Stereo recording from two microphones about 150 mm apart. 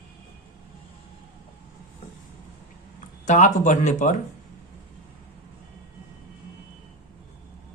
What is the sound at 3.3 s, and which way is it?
Speech, 55° left (ahead or behind).